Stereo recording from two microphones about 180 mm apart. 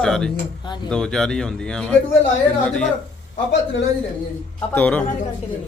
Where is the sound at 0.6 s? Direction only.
25° left (ahead or behind).